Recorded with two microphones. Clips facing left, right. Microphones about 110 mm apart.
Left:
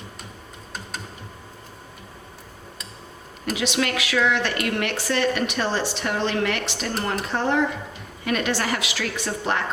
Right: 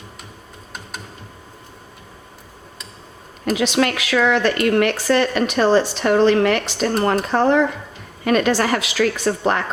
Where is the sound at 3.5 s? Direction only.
45° right (ahead or behind).